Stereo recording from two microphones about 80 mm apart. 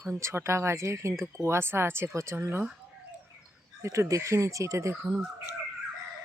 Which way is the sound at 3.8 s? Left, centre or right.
Right.